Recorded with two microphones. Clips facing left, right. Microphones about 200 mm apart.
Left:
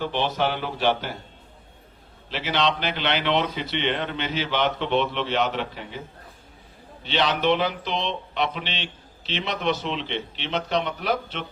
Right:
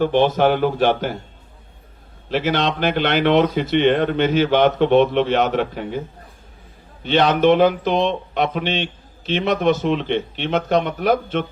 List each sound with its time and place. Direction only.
0.0 s speech: 50° right (ahead or behind)
2.3 s speech: 50° right (ahead or behind)
7.0 s speech: 50° right (ahead or behind)